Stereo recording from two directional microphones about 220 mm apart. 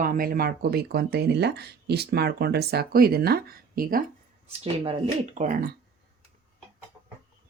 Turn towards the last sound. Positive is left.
turn(degrees=-40)  # may be behind; listen again after turning